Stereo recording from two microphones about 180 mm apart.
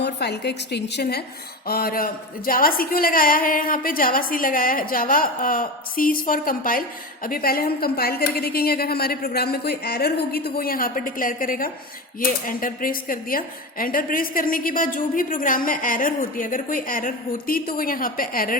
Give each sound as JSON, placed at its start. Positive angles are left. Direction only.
{"t": 0.0, "sound": "a woman's voice", "side_deg": 65}
{"t": 1.6, "sound": "a woman's voice", "side_deg": 55}